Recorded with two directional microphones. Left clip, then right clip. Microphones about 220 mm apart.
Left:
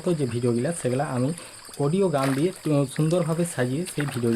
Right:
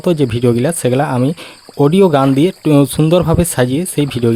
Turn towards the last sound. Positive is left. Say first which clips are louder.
# right 12 dB
turn(degrees=-45)  # may be behind; listen again after turning